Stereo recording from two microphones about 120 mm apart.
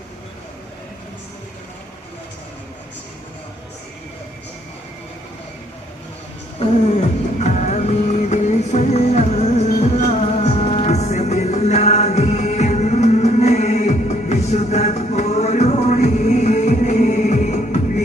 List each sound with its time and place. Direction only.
6.6 s music: 70° left (ahead or behind)